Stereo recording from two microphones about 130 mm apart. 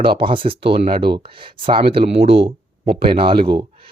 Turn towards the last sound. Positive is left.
turn(degrees=-40)  # may be behind; listen again after turning